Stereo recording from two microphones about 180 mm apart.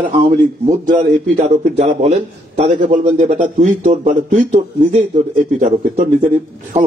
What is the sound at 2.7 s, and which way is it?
A man's voice, 45° right (ahead or behind).